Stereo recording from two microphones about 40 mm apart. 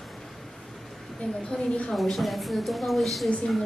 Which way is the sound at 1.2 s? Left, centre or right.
Left.